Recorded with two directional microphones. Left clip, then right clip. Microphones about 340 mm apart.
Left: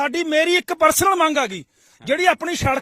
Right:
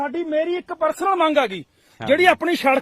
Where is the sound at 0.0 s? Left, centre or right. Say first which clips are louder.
Left 3 dB; left.